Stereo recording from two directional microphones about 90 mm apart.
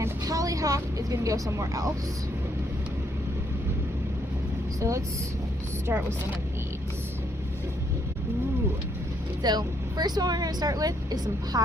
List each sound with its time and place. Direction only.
0.3 s a woman's voice: 40° right (ahead or behind)
4.8 s speech: 35° right (ahead or behind)
9.4 s speech: 50° right (ahead or behind)